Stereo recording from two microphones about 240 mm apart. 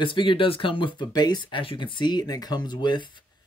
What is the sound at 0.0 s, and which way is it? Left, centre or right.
Speech, left.